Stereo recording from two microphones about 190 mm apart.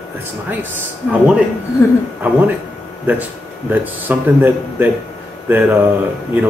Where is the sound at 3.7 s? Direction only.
10° right (ahead or behind).